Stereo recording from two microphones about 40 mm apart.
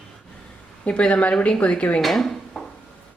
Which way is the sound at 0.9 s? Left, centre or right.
Left.